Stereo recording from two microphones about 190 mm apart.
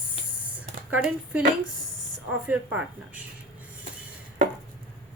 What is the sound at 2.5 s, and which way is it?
Speech, 5° right (ahead or behind).